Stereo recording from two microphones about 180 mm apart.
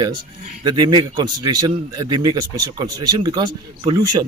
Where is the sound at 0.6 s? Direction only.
20° right (ahead or behind).